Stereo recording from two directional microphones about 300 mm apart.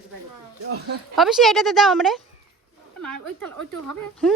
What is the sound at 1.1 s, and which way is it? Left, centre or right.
Speech, centre.